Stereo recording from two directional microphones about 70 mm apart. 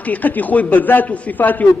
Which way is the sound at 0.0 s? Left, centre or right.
Left.